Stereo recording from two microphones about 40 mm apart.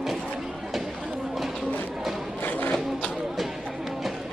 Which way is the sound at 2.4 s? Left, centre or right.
Left.